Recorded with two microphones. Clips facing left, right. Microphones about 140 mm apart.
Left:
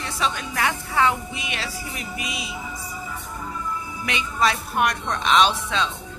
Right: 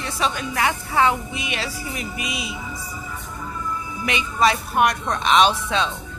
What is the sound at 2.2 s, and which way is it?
Speech, 10° right (ahead or behind).